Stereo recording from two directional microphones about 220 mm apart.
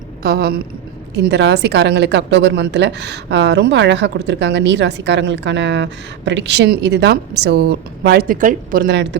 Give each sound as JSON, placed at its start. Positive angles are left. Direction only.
{"t": 0.2, "sound": "a woman's voice", "side_deg": -45}